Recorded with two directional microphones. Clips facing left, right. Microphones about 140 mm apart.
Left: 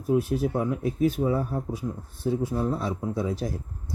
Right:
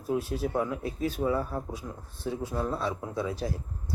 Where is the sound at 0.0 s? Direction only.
15° left (ahead or behind).